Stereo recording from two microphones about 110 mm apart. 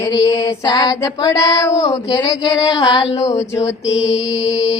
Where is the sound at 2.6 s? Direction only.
40° left (ahead or behind).